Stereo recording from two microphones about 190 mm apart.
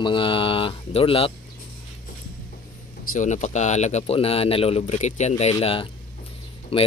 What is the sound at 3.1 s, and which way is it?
Speech, 40° left (ahead or behind).